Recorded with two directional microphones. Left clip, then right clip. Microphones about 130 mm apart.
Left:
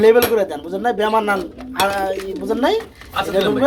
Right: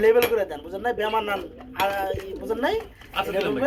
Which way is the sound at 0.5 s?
25° left (ahead or behind).